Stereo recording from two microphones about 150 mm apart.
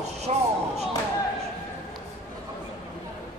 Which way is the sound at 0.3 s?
50° right (ahead or behind).